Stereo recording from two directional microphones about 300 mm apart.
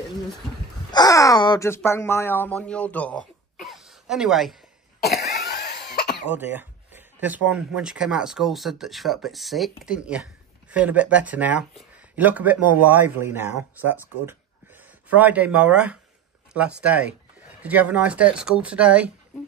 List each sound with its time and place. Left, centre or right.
0.9 s speech: centre
5.4 s cough: left
6.3 s speech: centre